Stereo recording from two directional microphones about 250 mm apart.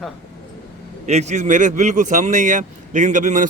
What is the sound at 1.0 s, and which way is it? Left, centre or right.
Speech, right.